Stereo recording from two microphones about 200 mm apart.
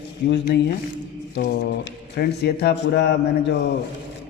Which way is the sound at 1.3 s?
55° left (ahead or behind).